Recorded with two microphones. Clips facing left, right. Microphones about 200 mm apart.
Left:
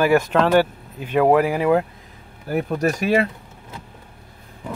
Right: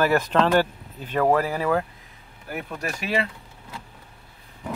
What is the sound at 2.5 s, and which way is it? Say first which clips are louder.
Speech: left 10 dB; 40° left (ahead or behind).